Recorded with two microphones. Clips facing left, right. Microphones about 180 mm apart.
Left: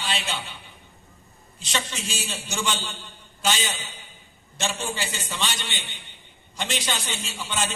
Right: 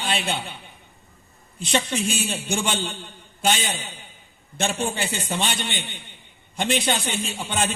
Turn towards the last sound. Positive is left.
turn(degrees=-55)  # may be behind; listen again after turning